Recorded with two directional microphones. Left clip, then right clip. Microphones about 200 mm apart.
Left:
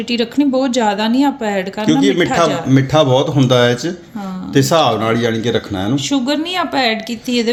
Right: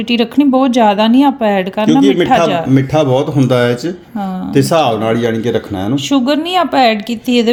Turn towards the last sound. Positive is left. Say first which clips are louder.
# right 4 dB
turn(degrees=-45)  # may be behind; listen again after turning